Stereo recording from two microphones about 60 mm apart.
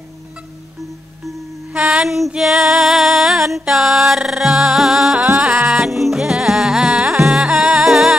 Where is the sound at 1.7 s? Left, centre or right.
Right.